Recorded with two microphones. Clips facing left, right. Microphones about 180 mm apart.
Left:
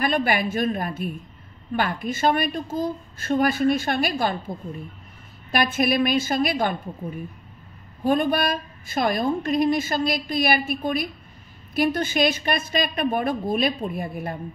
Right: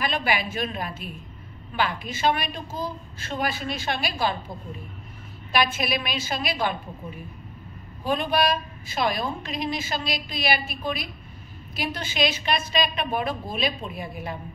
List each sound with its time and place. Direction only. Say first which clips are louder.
0.0 s a woman's voice: left 4 dB; 50° left (ahead or behind)
5.5 s a woman's voice: left 3 dB; 50° left (ahead or behind)
8.0 s a woman's voice: left 3 dB; 50° left (ahead or behind)